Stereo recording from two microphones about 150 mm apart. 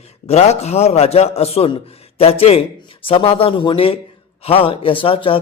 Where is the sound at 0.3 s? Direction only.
45° left (ahead or behind).